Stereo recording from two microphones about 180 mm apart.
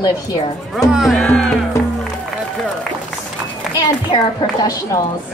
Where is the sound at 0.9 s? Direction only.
Centre (ahead or behind).